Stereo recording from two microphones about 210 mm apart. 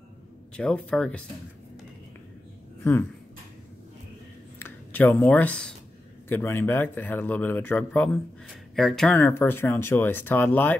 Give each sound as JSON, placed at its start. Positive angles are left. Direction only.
{"t": 0.6, "sound": "speech", "side_deg": 5}
{"t": 2.8, "sound": "speech", "side_deg": 10}
{"t": 4.6, "sound": "speech", "side_deg": 10}